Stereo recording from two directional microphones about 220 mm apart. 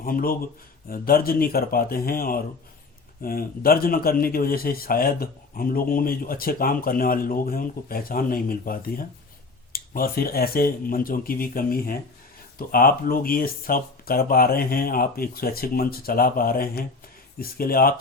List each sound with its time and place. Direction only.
0.0 s a man's voice: 40° left (ahead or behind)